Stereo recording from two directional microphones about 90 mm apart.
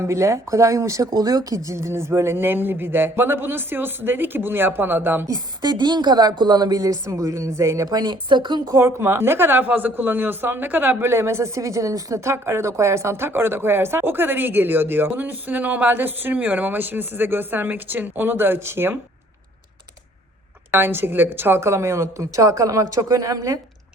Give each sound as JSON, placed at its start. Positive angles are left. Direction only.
{"t": 0.0, "sound": "a woman's voice", "side_deg": -30}
{"t": 5.2, "sound": "a woman's voice", "side_deg": -45}
{"t": 7.9, "sound": "speech", "side_deg": -50}
{"t": 8.6, "sound": "a woman's voice", "side_deg": -30}
{"t": 20.7, "sound": "a woman's voice", "side_deg": -25}